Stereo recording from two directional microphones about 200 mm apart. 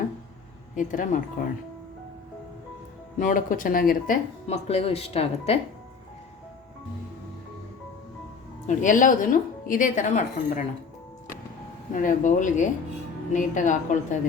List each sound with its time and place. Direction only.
0.8 s speech: 40° left (ahead or behind)
3.2 s speech: 40° left (ahead or behind)
8.6 s speech: 40° left (ahead or behind)
11.9 s speech: 40° left (ahead or behind)